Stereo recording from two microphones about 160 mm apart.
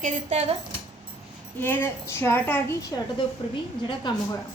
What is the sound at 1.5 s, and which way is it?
A woman's voice, 10° left (ahead or behind).